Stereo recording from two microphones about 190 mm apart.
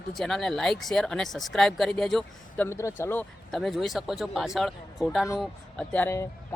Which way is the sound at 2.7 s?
15° left (ahead or behind).